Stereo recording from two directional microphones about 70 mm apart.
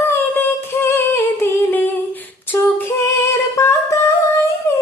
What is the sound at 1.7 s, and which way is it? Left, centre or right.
Humming, left.